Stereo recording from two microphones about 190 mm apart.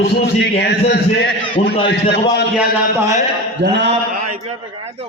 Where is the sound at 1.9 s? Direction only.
60° left (ahead or behind).